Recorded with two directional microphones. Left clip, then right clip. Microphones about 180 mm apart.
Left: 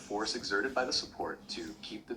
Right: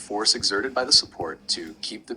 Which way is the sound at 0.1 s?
35° right (ahead or behind).